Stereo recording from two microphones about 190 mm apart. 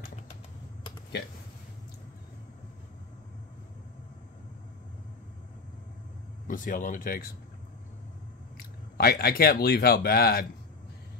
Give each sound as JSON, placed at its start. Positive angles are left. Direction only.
{"t": 6.4, "sound": "speech", "side_deg": 45}
{"t": 8.5, "sound": "speech", "side_deg": 55}